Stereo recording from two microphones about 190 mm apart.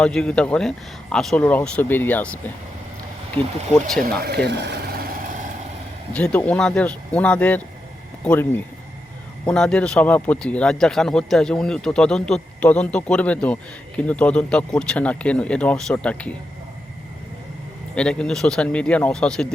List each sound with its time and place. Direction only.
0.0 s a man's voice: 5° left (ahead or behind)
4.4 s a sound: 60° right (ahead or behind)
6.1 s a man's voice: 5° left (ahead or behind)
17.9 s a man's voice: 5° left (ahead or behind)